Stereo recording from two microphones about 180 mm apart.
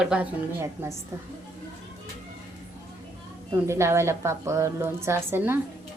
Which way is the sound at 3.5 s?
15° right (ahead or behind).